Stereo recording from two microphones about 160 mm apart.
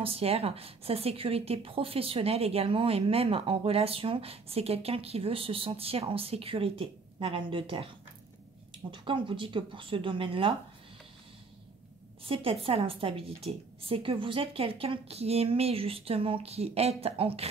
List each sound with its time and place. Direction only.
0.0 s a woman's voice: 35° right (ahead or behind)
8.9 s a woman's voice: 30° right (ahead or behind)
12.3 s a woman's voice: 35° right (ahead or behind)